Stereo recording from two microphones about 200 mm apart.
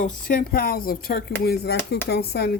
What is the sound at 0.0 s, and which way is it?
Speech, 45° left (ahead or behind).